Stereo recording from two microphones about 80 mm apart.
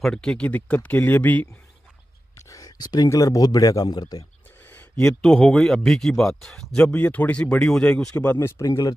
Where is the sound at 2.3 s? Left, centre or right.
Left.